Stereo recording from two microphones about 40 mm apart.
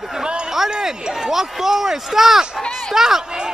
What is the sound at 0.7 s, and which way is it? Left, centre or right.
Speech, centre.